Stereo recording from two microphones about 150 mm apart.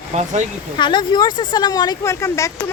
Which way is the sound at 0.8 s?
30° left (ahead or behind).